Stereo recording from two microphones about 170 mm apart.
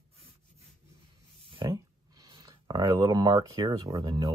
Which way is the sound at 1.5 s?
25° right (ahead or behind).